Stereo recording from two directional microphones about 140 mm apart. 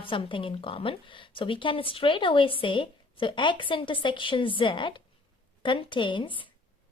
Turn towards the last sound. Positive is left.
turn(degrees=35)  # may be behind; listen again after turning